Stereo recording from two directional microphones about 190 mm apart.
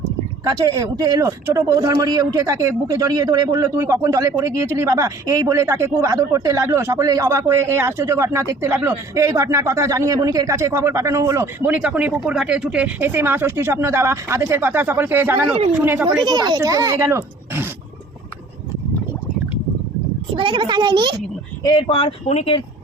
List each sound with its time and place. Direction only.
0.6 s speech: 20° right (ahead or behind)
16.2 s speech: 20° right (ahead or behind)
20.3 s a child's voice: 25° right (ahead or behind)
21.6 s speech: 25° left (ahead or behind)